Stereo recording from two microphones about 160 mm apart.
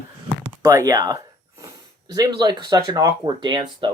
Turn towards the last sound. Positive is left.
turn(degrees=-30)  # may be behind; listen again after turning